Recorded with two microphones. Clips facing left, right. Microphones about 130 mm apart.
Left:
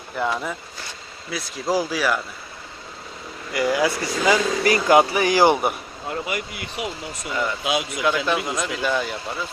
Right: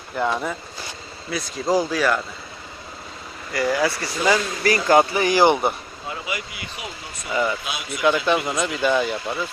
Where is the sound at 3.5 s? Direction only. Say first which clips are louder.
Left 1 dB; 20° left (ahead or behind).